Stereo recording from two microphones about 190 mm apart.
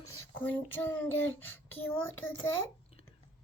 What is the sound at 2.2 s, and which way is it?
Speech, 90° left.